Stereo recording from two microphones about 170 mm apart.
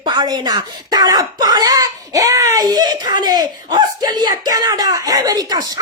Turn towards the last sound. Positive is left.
turn(degrees=-25)  # may be behind; listen again after turning